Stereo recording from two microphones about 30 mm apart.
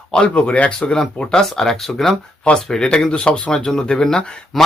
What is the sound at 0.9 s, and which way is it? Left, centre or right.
Speech, left.